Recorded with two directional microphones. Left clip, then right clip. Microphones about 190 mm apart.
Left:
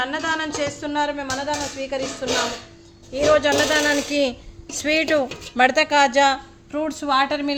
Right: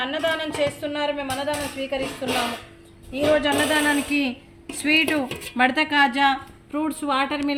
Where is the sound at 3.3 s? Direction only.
60° left (ahead or behind).